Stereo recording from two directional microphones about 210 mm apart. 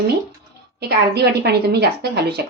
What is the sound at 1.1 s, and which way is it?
A woman's voice, 50° right (ahead or behind).